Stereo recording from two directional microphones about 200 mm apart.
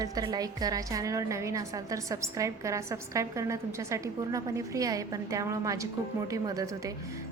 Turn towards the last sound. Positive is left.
turn(degrees=-15)  # may be behind; listen again after turning